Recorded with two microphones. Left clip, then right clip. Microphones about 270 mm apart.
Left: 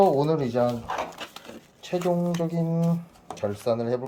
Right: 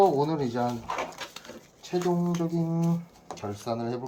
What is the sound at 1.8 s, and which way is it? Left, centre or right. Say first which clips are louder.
Speech: left 3 dB; left.